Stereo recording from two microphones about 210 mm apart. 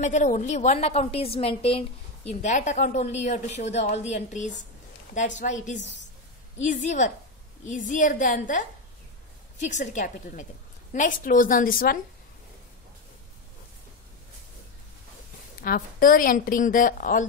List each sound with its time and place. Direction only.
0.0 s a woman's voice: 35° left (ahead or behind)
5.8 s a woman's voice: 60° left (ahead or behind)
6.6 s a woman's voice: 35° left (ahead or behind)
15.6 s a woman's voice: 45° left (ahead or behind)